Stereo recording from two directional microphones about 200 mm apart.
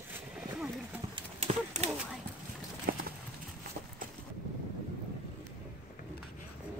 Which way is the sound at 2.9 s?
50° right (ahead or behind).